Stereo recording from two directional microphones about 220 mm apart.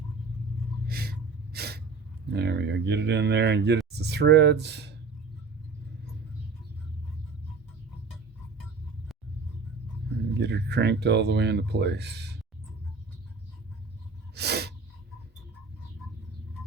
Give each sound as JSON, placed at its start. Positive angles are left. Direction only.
{"t": 0.9, "sound": "a sound", "side_deg": -45}
{"t": 1.5, "sound": "gasp", "side_deg": -45}
{"t": 2.3, "sound": "speech", "side_deg": -50}
{"t": 10.3, "sound": "speech", "side_deg": -50}
{"t": 14.3, "sound": "snort", "side_deg": -50}